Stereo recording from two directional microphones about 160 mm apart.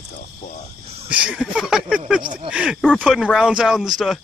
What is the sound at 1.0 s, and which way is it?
Speech, 5° right (ahead or behind).